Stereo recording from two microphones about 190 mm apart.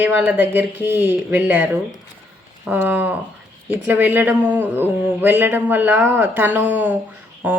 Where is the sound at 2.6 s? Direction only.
10° right (ahead or behind).